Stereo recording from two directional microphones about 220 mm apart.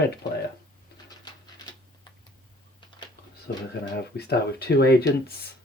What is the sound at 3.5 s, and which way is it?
Speech, 45° left (ahead or behind).